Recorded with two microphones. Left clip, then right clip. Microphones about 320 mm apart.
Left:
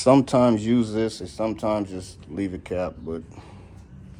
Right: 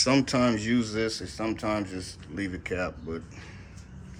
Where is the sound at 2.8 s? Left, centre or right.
Centre.